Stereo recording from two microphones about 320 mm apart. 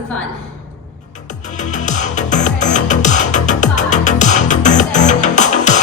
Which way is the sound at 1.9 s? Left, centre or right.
Left.